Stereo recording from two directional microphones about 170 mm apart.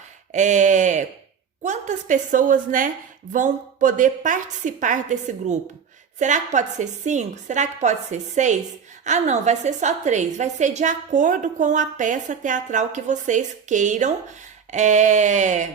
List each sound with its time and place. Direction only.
0.3 s a woman's voice: 45° right (ahead or behind)